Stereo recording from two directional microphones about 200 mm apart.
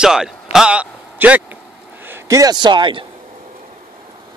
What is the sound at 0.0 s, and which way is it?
A man's voice, 5° right (ahead or behind).